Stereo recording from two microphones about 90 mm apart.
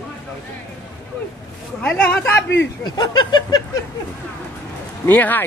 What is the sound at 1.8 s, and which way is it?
Speech, 15° left (ahead or behind).